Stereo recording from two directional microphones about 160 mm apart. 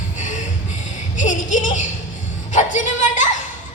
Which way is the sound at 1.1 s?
50° left (ahead or behind).